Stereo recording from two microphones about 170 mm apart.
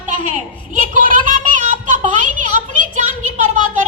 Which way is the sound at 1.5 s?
50° right (ahead or behind).